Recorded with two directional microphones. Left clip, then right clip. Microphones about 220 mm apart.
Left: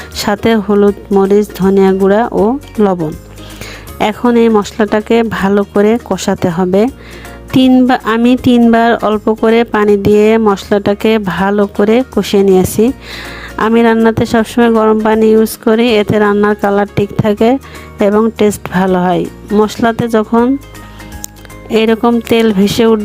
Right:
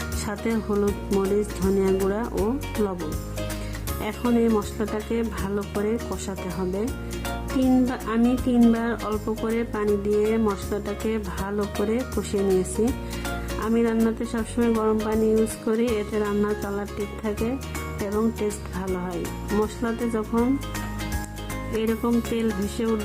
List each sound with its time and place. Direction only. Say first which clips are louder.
0.3 s speech: left 17 dB; 40° left (ahead or behind)
4.2 s speech: left 13 dB; 40° left (ahead or behind)
13.6 s speech: left 15 dB; 45° left (ahead or behind)
21.8 s speech: left 15 dB; 45° left (ahead or behind)